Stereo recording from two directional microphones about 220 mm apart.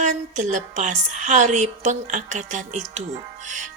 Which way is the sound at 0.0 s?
35° right (ahead or behind).